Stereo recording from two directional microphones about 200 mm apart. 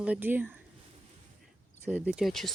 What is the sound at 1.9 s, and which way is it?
Speech, 5° right (ahead or behind).